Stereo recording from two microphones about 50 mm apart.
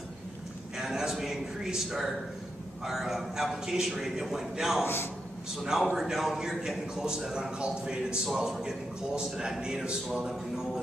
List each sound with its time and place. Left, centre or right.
0.7 s a man's voice: centre
4.8 s a man's voice: left
5.6 s a man's voice: centre